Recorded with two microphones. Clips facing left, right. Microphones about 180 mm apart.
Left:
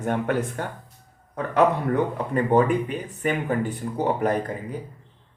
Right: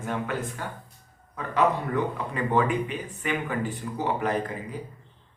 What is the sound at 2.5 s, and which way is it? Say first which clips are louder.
A man's voice: left 4 dB; 45° left (ahead or behind).